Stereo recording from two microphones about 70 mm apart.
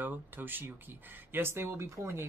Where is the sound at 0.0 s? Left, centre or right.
Right.